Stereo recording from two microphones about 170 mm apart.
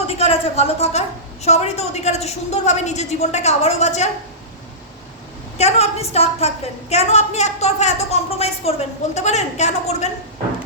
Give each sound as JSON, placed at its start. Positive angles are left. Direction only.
{"t": 0.1, "sound": "a woman's voice", "side_deg": 35}
{"t": 5.5, "sound": "a woman's voice", "side_deg": 40}